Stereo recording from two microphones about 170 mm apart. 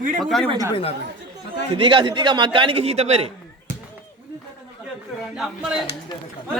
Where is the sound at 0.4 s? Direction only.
25° right (ahead or behind).